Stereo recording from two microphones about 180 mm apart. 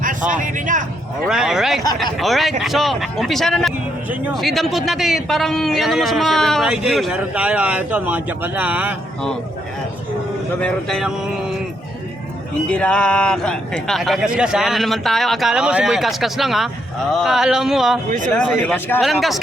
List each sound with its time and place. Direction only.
0.3 s speech: 45° right (ahead or behind)
1.3 s a man's voice: 5° right (ahead or behind)
10.6 s a man's voice: centre (ahead or behind)
12.6 s a man's voice: 5° left (ahead or behind)
18.6 s a man's voice: 10° left (ahead or behind)